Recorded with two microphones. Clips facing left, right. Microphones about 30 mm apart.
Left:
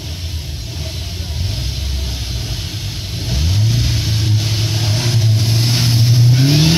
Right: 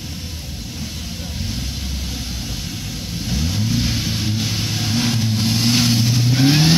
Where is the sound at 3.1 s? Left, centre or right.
Left.